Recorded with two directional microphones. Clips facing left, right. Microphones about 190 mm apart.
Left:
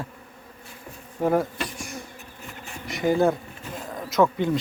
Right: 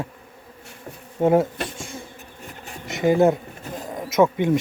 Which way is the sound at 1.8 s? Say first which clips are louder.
Right 1 dB; 25° right (ahead or behind).